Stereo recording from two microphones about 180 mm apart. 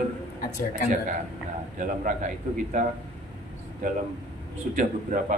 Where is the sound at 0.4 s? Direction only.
50° left (ahead or behind).